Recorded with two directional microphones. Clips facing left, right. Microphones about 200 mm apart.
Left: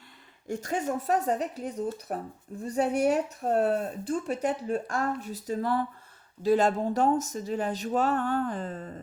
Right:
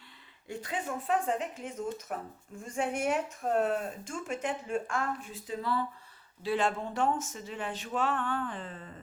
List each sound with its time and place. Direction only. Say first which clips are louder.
0.4 s speech: left 6 dB; 45° left (ahead or behind)